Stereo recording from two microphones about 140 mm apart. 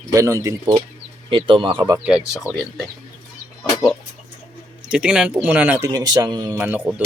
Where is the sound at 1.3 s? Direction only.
35° right (ahead or behind).